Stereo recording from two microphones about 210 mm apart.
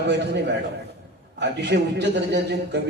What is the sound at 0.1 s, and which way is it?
A man's voice, 55° right (ahead or behind).